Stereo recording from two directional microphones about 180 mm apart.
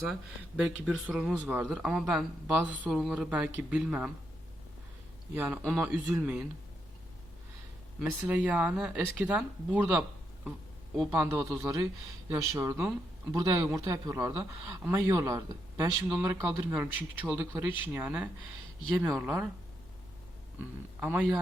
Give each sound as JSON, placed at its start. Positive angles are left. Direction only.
{"t": 0.1, "sound": "speech", "side_deg": -5}
{"t": 5.3, "sound": "speech", "side_deg": -10}
{"t": 7.9, "sound": "speech", "side_deg": -10}
{"t": 11.1, "sound": "speech", "side_deg": -10}
{"t": 20.6, "sound": "speech", "side_deg": -10}